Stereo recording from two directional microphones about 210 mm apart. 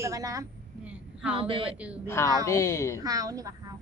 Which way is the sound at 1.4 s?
25° right (ahead or behind).